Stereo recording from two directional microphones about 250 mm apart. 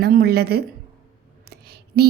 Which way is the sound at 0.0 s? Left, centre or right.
Right.